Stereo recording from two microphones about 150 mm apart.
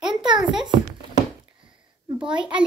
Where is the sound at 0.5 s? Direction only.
30° right (ahead or behind).